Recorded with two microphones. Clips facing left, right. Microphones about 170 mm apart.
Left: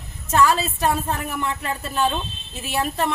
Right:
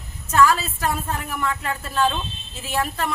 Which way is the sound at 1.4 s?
25° left (ahead or behind).